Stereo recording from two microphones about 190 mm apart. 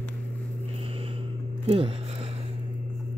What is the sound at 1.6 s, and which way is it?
Speech, 30° right (ahead or behind).